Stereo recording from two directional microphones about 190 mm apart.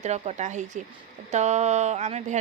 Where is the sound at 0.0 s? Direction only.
35° right (ahead or behind).